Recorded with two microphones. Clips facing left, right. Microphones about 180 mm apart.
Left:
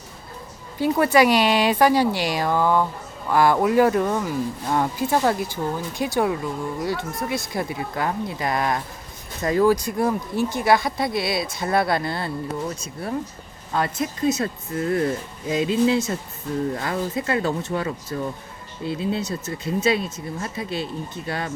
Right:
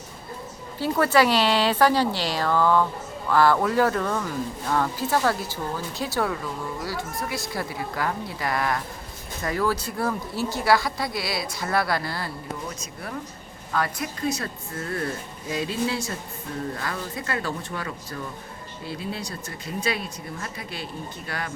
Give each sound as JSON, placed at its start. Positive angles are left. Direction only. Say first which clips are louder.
{"t": 0.8, "sound": "speech", "louder": "left 3 dB", "side_deg": 15}